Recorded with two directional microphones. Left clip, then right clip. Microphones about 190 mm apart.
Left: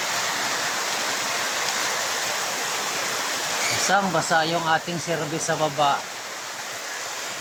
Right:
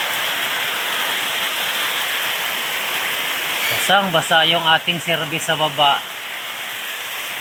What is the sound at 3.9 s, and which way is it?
Speech, 5° right (ahead or behind).